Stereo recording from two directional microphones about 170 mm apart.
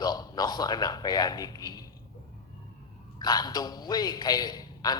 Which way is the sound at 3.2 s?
25° left (ahead or behind).